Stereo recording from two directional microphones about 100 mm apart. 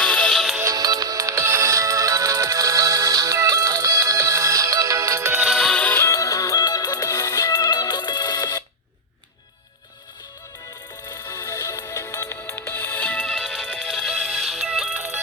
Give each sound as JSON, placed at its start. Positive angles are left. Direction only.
{"t": 0.0, "sound": "music", "side_deg": 10}
{"t": 0.6, "sound": "music", "side_deg": -40}
{"t": 5.4, "sound": "music", "side_deg": 0}
{"t": 6.1, "sound": "music", "side_deg": 35}
{"t": 11.1, "sound": "music", "side_deg": 35}
{"t": 13.2, "sound": "music", "side_deg": 0}